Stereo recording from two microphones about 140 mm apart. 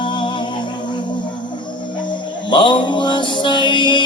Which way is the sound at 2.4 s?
35° left (ahead or behind).